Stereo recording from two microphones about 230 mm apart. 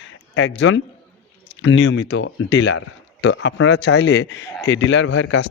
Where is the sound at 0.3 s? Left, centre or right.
Left.